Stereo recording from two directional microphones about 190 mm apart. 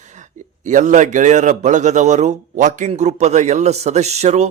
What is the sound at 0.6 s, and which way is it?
A man's voice, 40° right (ahead or behind).